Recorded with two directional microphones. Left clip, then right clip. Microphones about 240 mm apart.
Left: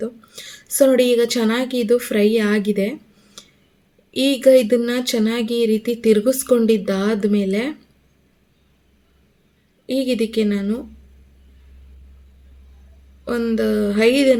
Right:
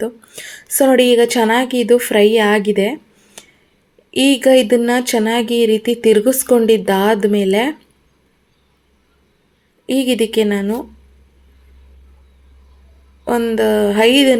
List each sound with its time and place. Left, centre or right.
0.0 s speech: centre
9.8 s a woman's voice: right
10.1 s a woman's voice: centre
13.2 s speech: centre